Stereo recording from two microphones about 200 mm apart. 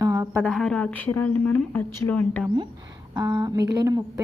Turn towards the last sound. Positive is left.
turn(degrees=-20)  # may be behind; listen again after turning